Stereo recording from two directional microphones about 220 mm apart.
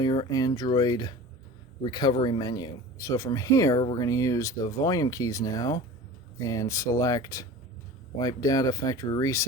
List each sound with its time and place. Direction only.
0.0 s speech: 20° left (ahead or behind)